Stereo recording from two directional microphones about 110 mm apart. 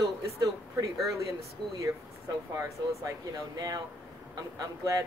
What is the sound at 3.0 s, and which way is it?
Speech, 30° right (ahead or behind).